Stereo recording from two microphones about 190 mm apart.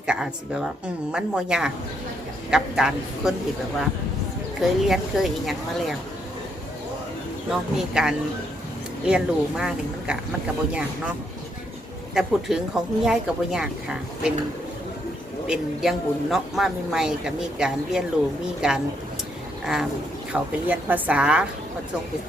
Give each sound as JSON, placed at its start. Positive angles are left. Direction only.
{"t": 0.1, "sound": "a woman's voice", "side_deg": -5}
{"t": 4.6, "sound": "speech", "side_deg": 0}
{"t": 7.5, "sound": "speech", "side_deg": -5}
{"t": 12.1, "sound": "speech", "side_deg": -5}
{"t": 15.4, "sound": "speech", "side_deg": 0}
{"t": 20.3, "sound": "a woman's voice", "side_deg": -10}